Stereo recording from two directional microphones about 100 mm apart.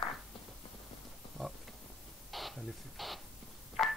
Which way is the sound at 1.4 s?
Centre (ahead or behind).